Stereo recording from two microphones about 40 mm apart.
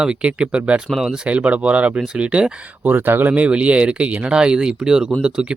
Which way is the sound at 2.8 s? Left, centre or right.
Right.